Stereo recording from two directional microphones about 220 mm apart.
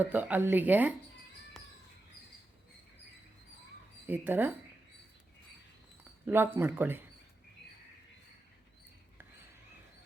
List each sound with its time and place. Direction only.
0.0 s speech: 5° right (ahead or behind)
4.0 s speech: 10° right (ahead or behind)
6.2 s speech: 10° right (ahead or behind)